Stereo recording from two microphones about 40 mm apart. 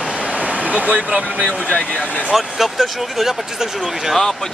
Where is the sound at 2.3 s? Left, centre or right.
Centre.